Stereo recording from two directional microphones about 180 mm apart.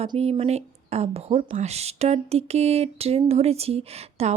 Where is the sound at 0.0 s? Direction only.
35° right (ahead or behind).